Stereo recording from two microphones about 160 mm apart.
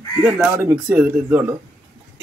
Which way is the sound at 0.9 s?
10° right (ahead or behind).